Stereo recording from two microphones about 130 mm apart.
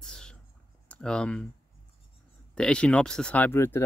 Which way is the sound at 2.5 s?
5° left (ahead or behind).